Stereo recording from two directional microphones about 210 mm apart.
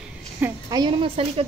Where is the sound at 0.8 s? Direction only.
25° right (ahead or behind).